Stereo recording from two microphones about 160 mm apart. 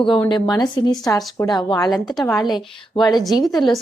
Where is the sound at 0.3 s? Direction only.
25° left (ahead or behind).